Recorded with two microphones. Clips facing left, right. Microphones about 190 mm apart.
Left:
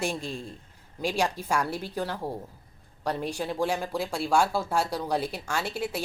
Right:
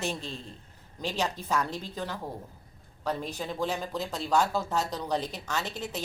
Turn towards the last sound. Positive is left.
turn(degrees=10)  # may be behind; listen again after turning